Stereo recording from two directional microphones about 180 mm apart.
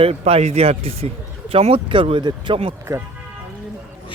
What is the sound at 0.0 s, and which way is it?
Speech, 35° right (ahead or behind).